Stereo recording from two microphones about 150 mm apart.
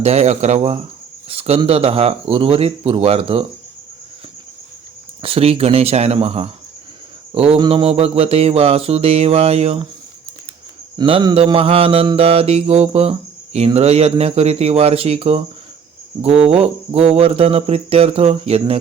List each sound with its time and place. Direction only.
0.0 s speech: 45° right (ahead or behind)
1.3 s mantra: 40° right (ahead or behind)
5.2 s mantra: 40° right (ahead or behind)
10.9 s mantra: 35° right (ahead or behind)